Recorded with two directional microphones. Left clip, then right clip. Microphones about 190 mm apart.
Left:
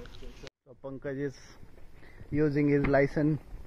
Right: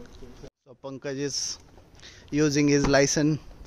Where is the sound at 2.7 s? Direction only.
20° right (ahead or behind).